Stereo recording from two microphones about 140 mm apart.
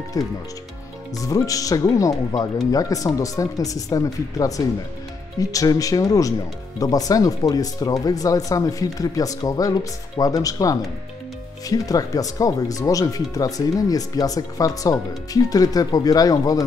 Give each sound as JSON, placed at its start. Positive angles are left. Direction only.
{"t": 0.2, "sound": "speech", "side_deg": 25}